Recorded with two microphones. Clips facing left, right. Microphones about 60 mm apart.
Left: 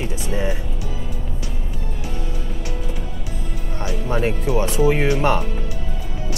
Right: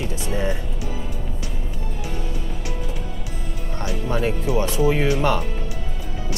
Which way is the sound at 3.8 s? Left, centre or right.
Left.